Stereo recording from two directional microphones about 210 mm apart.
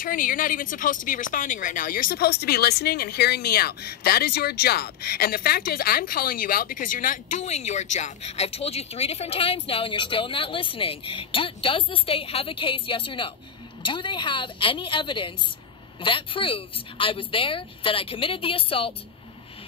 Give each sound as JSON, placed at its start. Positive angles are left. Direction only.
{"t": 0.0, "sound": "a woman's voice", "side_deg": 40}